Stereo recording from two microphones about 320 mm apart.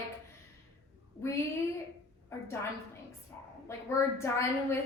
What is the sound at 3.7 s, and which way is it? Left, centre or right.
A woman's voice, centre.